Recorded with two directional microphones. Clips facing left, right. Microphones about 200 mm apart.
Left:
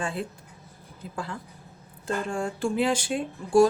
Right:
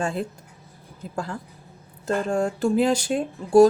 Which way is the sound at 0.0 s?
40° right (ahead or behind).